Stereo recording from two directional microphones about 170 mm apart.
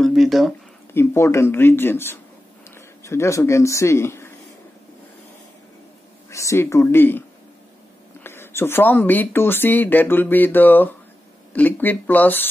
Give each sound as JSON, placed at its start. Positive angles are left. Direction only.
{"t": 0.0, "sound": "a sound", "side_deg": 0}
{"t": 0.9, "sound": "speech", "side_deg": 15}
{"t": 6.3, "sound": "speech", "side_deg": 15}